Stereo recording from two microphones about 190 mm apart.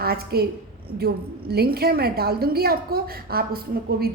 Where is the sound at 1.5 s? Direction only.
55° right (ahead or behind).